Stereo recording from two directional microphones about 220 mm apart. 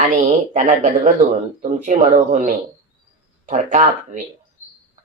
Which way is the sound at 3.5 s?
35° right (ahead or behind).